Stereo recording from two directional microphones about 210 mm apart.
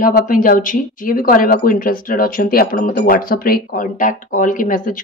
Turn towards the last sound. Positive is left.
turn(degrees=40)  # may be behind; listen again after turning